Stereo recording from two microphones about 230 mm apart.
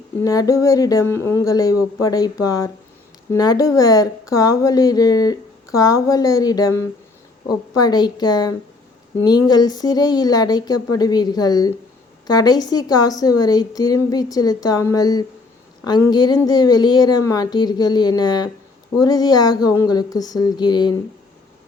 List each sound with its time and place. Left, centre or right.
0.2 s speech: centre